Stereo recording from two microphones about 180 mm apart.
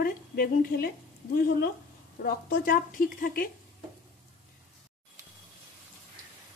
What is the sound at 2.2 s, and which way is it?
A woman's voice, 55° left (ahead or behind).